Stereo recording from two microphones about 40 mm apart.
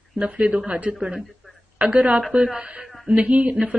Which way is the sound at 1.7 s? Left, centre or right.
Right.